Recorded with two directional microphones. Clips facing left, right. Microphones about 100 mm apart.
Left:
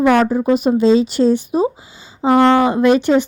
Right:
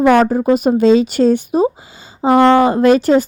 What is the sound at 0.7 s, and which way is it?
Speech, 55° right (ahead or behind).